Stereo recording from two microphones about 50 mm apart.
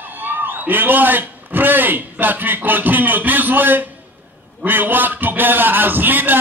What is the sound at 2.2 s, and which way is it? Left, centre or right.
A man's voice, right.